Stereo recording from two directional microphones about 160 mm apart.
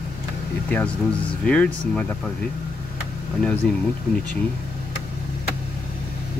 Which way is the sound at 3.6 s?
5° left (ahead or behind).